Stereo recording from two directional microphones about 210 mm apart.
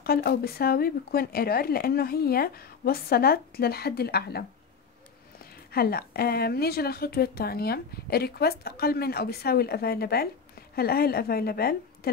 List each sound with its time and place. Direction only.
0.0 s a woman's voice: 50° left (ahead or behind)
5.7 s a woman's voice: 45° left (ahead or behind)